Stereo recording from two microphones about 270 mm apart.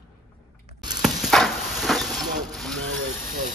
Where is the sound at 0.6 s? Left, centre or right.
Centre.